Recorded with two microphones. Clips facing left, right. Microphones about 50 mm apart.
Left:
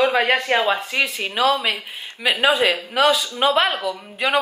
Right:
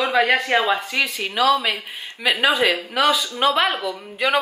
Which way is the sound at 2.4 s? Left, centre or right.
Centre.